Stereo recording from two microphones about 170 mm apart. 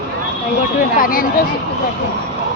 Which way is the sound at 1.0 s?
55° left (ahead or behind).